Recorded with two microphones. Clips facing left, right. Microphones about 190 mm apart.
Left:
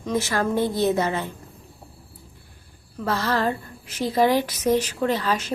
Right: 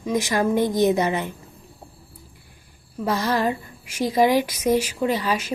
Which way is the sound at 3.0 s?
15° right (ahead or behind).